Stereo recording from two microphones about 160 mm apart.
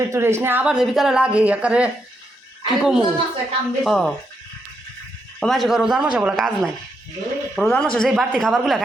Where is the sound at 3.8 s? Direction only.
Centre (ahead or behind).